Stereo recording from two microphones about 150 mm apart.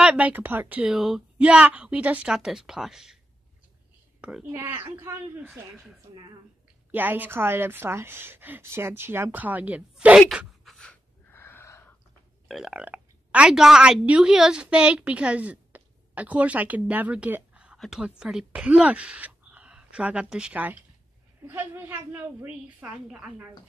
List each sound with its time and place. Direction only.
0.0 s speech: 5° right (ahead or behind)
4.2 s a woman's voice: 5° right (ahead or behind)
5.5 s a woman's voice: 5° right (ahead or behind)
10.3 s sneeze: centre (ahead or behind); by 11.8 s 15° left (ahead or behind)
12.4 s a woman's voice: 5° right (ahead or behind)